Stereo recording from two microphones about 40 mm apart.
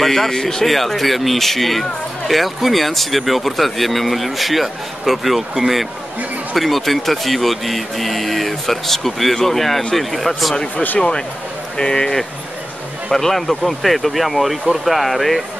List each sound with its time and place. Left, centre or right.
0.0 s speech: centre
11.0 s speech: left
13.1 s speech: centre